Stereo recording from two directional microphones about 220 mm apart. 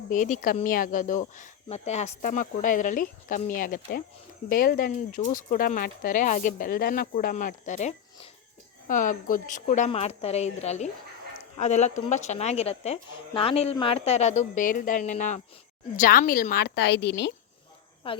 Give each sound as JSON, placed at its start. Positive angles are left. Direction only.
{"t": 0.1, "sound": "a woman's voice", "side_deg": 35}
{"t": 18.0, "sound": "speech", "side_deg": 25}